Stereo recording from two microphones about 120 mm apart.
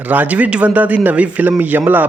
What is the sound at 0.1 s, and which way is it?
Speech, 15° right (ahead or behind).